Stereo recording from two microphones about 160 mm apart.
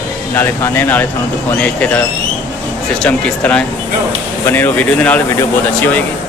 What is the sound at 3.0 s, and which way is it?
Speech, 5° left (ahead or behind).